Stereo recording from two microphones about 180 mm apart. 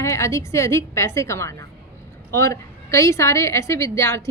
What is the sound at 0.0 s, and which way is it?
A woman's voice, 15° left (ahead or behind).